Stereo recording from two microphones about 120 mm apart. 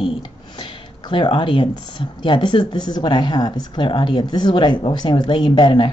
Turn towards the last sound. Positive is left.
turn(degrees=40)  # may be behind; listen again after turning